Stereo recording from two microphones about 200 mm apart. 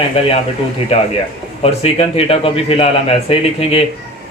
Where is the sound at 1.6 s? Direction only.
30° left (ahead or behind).